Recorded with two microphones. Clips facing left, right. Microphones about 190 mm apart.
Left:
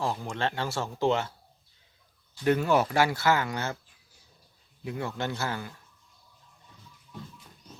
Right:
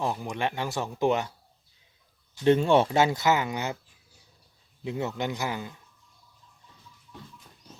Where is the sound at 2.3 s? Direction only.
25° right (ahead or behind).